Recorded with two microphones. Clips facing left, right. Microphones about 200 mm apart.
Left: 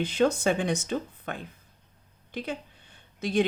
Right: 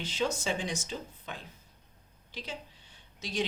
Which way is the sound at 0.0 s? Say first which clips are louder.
Left 9 dB; 55° left (ahead or behind).